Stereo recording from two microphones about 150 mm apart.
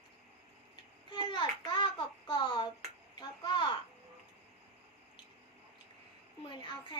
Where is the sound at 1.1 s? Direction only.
30° left (ahead or behind).